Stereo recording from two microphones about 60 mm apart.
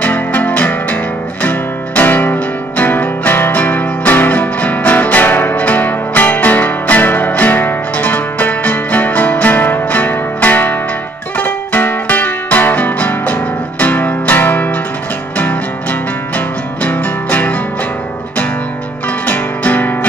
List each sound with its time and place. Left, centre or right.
0.0 s music: left
19.2 s music: left